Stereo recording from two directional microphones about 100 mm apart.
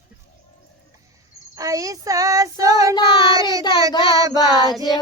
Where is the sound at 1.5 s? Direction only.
35° right (ahead or behind).